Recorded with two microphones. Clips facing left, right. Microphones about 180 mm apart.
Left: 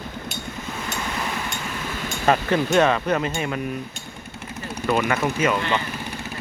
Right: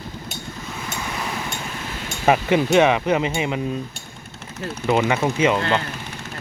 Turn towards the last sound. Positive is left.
turn(degrees=-20)  # may be behind; listen again after turning